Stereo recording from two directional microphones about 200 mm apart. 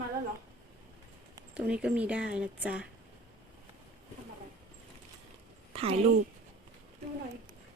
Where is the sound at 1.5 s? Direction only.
5° right (ahead or behind).